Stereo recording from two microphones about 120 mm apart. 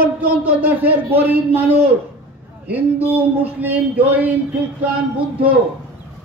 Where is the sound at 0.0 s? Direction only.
15° right (ahead or behind).